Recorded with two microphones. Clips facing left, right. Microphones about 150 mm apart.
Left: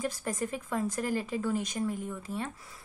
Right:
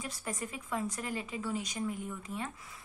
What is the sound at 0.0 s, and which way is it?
A woman's voice, 40° left (ahead or behind).